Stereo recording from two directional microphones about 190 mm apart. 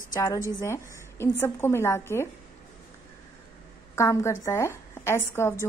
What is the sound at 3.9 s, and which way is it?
A woman's voice, 15° left (ahead or behind).